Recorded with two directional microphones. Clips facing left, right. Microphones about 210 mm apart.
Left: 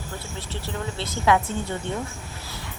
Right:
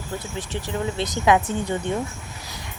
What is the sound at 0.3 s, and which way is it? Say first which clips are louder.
A woman's voice: right 4 dB; 15° right (ahead or behind).